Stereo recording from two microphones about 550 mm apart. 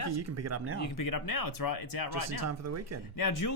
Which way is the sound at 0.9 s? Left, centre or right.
Left.